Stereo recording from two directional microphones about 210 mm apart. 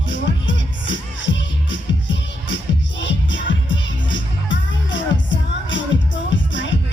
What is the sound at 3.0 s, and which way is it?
Music, 60° left (ahead or behind).